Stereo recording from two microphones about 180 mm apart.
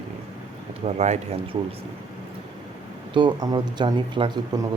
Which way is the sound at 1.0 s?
35° right (ahead or behind).